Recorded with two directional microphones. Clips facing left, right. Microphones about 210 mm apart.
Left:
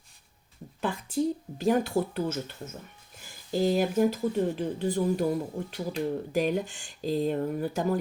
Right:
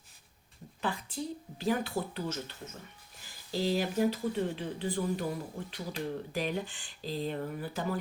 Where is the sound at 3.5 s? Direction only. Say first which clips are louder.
Left 6 dB; 45° left (ahead or behind).